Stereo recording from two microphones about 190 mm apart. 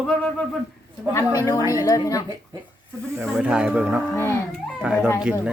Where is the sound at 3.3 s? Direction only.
5° right (ahead or behind).